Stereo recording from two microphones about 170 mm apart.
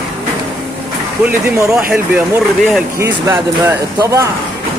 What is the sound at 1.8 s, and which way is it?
Speech, 10° right (ahead or behind).